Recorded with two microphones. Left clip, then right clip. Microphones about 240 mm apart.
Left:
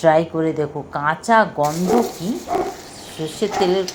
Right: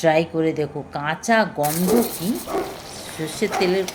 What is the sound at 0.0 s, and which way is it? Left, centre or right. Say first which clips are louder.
Speech: left 3 dB; centre.